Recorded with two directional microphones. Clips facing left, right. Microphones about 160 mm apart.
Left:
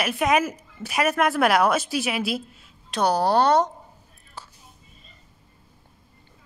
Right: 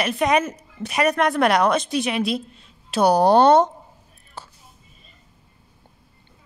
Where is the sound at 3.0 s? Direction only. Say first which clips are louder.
Right 5 dB; 15° right (ahead or behind).